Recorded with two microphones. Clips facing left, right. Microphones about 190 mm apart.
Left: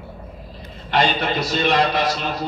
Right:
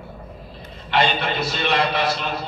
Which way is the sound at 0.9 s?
40° left (ahead or behind).